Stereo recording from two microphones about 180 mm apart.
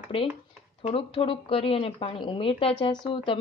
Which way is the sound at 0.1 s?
30° left (ahead or behind).